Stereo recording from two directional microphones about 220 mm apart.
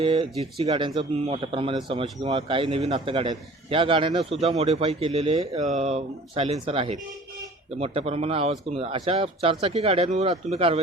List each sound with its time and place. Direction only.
0.0 s speech: 20° right (ahead or behind)